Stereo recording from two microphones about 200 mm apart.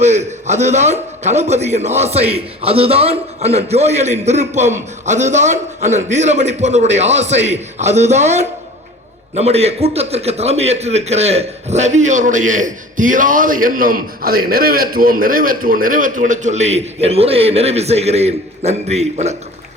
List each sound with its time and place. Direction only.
0.0 s a man's voice: 35° right (ahead or behind)